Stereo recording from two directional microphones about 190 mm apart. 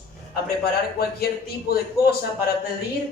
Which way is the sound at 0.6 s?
55° left (ahead or behind).